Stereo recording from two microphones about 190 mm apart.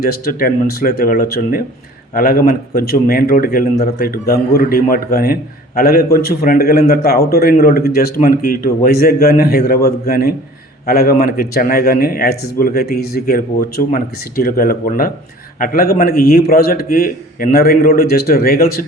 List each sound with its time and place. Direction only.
0.0 s speech: 50° left (ahead or behind)